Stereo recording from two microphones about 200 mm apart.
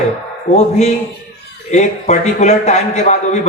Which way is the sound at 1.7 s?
35° left (ahead or behind).